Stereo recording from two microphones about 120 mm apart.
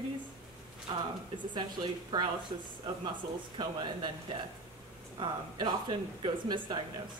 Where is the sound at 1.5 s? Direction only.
40° right (ahead or behind).